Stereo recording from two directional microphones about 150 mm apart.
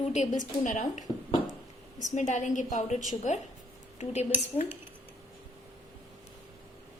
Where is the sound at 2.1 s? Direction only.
55° left (ahead or behind).